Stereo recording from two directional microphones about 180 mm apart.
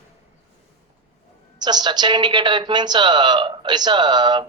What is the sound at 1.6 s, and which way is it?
Speech, 25° right (ahead or behind).